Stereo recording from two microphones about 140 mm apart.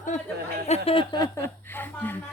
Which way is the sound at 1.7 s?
15° left (ahead or behind).